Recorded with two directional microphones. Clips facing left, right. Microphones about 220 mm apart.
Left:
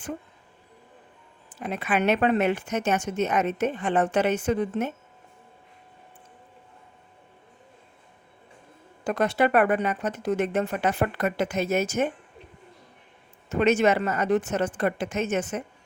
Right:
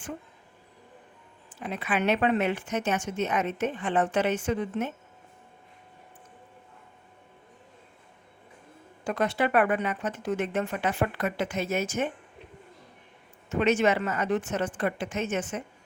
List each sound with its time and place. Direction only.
1.5 s a woman's voice: 45° left (ahead or behind)
9.0 s a woman's voice: 40° left (ahead or behind)
13.5 s a woman's voice: 40° left (ahead or behind)